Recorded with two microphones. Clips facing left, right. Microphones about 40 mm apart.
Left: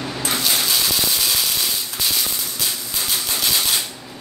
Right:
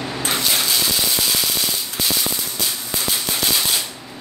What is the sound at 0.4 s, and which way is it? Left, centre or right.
Ratchet, centre.